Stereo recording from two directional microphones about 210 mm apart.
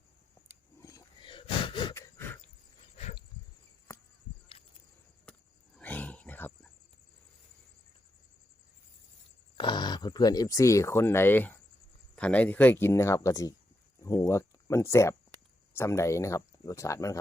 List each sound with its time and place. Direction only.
0.8 s wheeze: 15° left (ahead or behind)
3.0 s a sound: 35° left (ahead or behind)
5.7 s wild animals: 5° left (ahead or behind)
9.6 s speech: 20° left (ahead or behind)